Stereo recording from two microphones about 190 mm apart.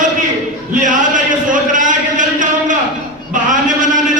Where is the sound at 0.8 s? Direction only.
40° right (ahead or behind).